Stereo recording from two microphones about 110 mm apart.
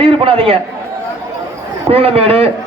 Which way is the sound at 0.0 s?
55° right (ahead or behind).